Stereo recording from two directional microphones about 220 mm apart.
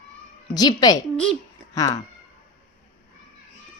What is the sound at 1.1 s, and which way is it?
Speech, 5° left (ahead or behind).